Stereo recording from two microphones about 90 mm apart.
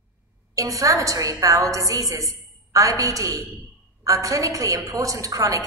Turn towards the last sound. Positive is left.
turn(degrees=-40)  # may be behind; listen again after turning